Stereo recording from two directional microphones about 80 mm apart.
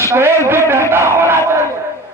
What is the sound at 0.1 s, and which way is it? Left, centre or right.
Speech, right.